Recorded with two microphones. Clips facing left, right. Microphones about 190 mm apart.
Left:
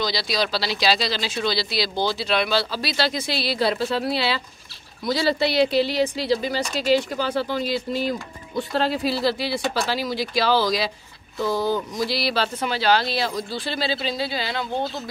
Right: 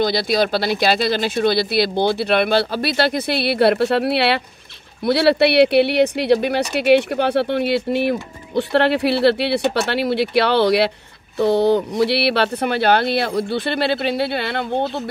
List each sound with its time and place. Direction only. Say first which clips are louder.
0.0 s speech: right 7 dB; 55° right (ahead or behind)